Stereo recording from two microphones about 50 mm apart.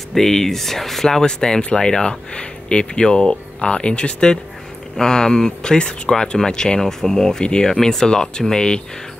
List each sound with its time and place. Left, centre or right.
0.1 s speech: centre